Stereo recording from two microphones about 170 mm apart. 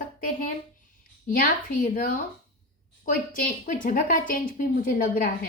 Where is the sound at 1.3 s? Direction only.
55° left (ahead or behind).